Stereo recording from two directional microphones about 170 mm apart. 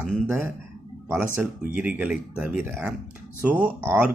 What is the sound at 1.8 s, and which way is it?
Speech, 10° right (ahead or behind).